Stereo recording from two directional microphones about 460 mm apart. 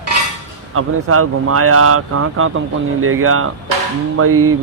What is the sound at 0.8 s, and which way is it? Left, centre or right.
Speech, right.